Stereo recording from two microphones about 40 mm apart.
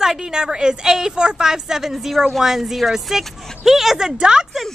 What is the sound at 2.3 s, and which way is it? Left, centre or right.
Speech, centre.